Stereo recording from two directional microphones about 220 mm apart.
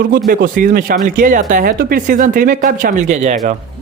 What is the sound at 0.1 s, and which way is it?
Speech, 40° right (ahead or behind).